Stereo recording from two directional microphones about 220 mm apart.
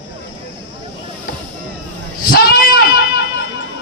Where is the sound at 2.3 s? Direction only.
40° left (ahead or behind).